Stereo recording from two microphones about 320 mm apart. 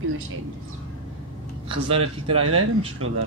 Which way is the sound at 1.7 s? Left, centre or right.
Centre.